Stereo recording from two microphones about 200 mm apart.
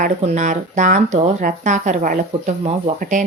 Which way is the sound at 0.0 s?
35° right (ahead or behind).